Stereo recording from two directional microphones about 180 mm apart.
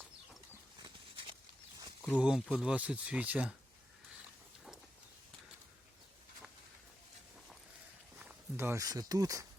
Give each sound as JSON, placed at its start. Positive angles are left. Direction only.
{"t": 0.8, "sound": "a sound", "side_deg": -25}
{"t": 2.0, "sound": "speech", "side_deg": -5}
{"t": 8.2, "sound": "speech", "side_deg": -10}